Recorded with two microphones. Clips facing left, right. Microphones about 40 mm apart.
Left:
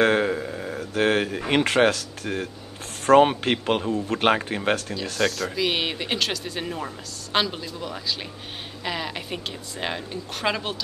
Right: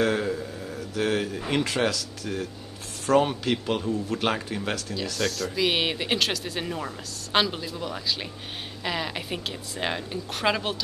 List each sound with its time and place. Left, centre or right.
0.0 s a sound: left
3.1 s speech: left
5.2 s speech: centre